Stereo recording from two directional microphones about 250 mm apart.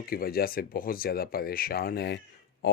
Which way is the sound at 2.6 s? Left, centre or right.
Left.